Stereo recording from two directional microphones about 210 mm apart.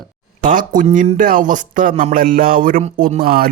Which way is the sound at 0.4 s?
40° right (ahead or behind).